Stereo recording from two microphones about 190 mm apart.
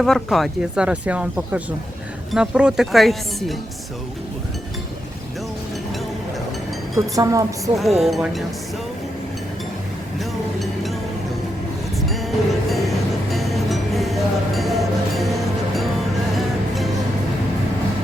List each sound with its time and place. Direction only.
0.0 s speech: centre (ahead or behind)
6.9 s speech: 15° right (ahead or behind)
7.8 s speech: centre (ahead or behind)
11.9 s music: centre (ahead or behind)